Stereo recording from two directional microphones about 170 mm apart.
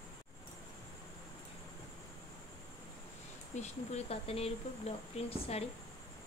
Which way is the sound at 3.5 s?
40° left (ahead or behind).